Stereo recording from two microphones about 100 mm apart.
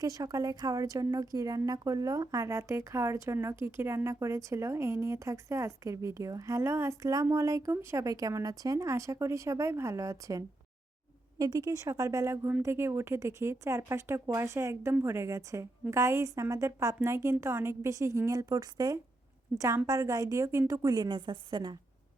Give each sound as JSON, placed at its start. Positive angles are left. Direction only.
{"t": 0.0, "sound": "a woman's voice", "side_deg": -35}
{"t": 19.6, "sound": "a woman's voice", "side_deg": -30}